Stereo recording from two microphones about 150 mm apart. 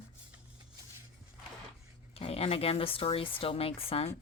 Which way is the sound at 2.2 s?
40° left (ahead or behind).